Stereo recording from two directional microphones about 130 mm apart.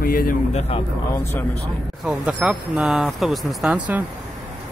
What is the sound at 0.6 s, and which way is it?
Speech, 50° left (ahead or behind).